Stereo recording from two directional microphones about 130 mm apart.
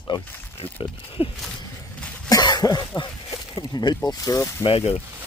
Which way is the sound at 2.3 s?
30° left (ahead or behind).